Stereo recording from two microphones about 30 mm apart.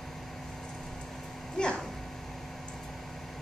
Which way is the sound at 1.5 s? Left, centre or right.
Left.